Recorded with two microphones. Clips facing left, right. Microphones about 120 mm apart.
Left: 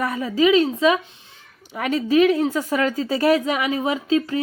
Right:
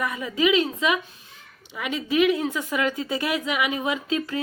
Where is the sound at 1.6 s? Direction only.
45° left (ahead or behind).